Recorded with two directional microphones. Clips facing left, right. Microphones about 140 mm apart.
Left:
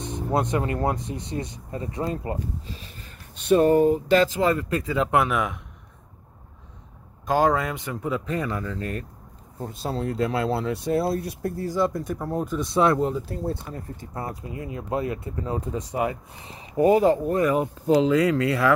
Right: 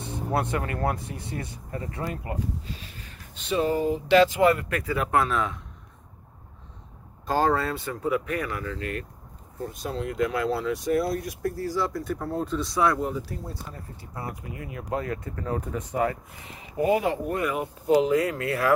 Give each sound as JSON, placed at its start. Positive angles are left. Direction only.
{"t": 0.0, "sound": "speech", "side_deg": 20}
{"t": 3.4, "sound": "speech", "side_deg": 50}
{"t": 4.4, "sound": "speech", "side_deg": 25}
{"t": 7.2, "sound": "speech", "side_deg": 15}
{"t": 8.5, "sound": "speech", "side_deg": 35}
{"t": 13.5, "sound": "speech", "side_deg": 45}
{"t": 16.3, "sound": "speech", "side_deg": 30}